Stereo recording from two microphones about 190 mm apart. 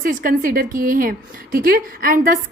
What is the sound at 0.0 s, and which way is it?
Speech, 45° right (ahead or behind).